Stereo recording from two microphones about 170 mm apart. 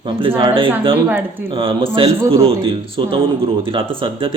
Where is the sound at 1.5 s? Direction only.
30° right (ahead or behind).